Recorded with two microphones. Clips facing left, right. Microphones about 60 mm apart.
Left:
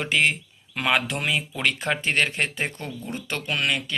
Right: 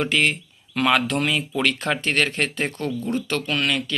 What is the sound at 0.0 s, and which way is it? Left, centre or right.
Speech, centre.